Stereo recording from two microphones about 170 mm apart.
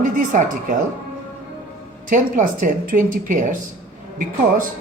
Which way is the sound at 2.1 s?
50° right (ahead or behind).